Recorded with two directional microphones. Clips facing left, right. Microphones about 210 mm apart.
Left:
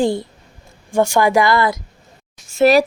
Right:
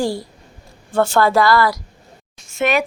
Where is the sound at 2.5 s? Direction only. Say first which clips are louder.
Left 6 dB; 35° left (ahead or behind).